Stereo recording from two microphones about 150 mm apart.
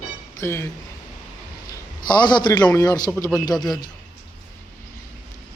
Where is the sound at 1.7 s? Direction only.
30° left (ahead or behind).